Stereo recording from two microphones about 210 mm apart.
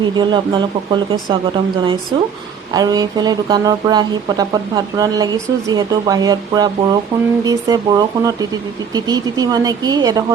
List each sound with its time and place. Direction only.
0.0 s speech: 20° right (ahead or behind)